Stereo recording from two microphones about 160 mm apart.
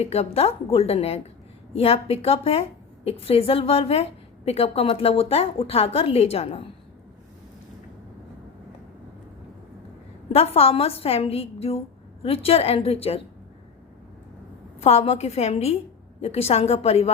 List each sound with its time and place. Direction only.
0.0 s a woman's voice: 40° left (ahead or behind)
10.3 s a woman's voice: 40° left (ahead or behind)
14.8 s a woman's voice: 40° left (ahead or behind)